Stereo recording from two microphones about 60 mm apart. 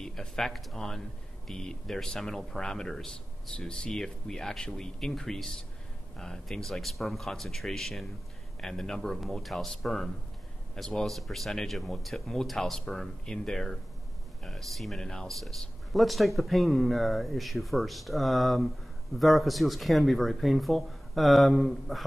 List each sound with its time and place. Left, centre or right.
0.0 s speech: centre
3.5 s speech: centre
3.9 s speech: centre